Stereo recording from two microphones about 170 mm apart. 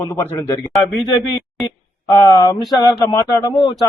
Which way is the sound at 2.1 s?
20° left (ahead or behind).